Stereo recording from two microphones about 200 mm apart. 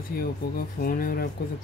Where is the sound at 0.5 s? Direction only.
45° left (ahead or behind).